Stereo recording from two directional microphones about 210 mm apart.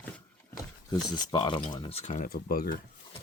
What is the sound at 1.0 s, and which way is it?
Speech, 20° left (ahead or behind).